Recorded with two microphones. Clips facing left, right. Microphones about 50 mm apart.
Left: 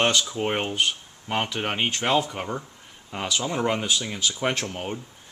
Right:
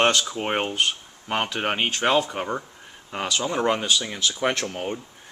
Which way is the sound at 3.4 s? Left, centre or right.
Centre.